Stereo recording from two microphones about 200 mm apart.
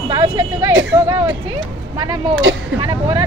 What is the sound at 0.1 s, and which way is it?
Speech, 20° right (ahead or behind).